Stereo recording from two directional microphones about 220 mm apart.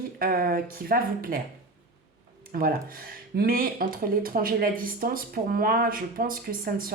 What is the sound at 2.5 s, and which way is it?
Speech, 40° right (ahead or behind).